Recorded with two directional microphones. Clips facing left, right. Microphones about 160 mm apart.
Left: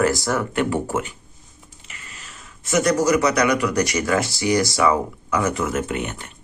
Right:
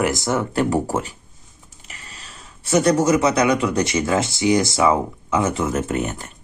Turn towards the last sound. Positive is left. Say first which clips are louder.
# right 3 dB
turn(degrees=-40)  # may be behind; listen again after turning